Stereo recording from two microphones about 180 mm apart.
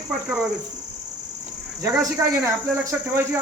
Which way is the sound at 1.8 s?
15° right (ahead or behind).